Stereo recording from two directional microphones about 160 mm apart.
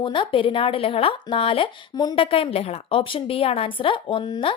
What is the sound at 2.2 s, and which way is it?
A woman's voice, 35° left (ahead or behind).